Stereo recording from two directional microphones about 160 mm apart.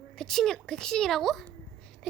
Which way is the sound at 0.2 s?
5° left (ahead or behind).